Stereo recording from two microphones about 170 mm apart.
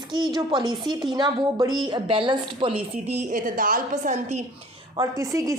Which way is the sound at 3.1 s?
55° right (ahead or behind).